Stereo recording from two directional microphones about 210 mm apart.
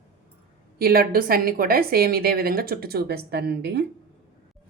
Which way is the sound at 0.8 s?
45° right (ahead or behind).